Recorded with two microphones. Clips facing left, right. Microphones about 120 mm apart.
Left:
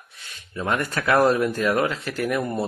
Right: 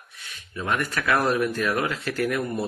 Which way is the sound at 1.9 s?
20° left (ahead or behind).